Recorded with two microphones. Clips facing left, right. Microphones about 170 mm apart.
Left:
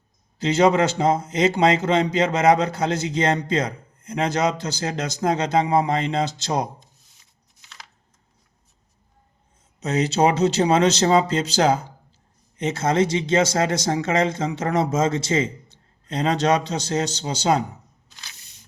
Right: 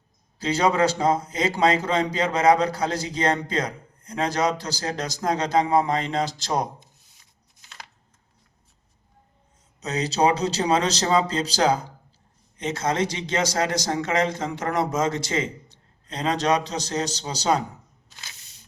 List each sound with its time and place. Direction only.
0.3 s a man's voice: 25° left (ahead or behind)
9.8 s a man's voice: 25° left (ahead or behind)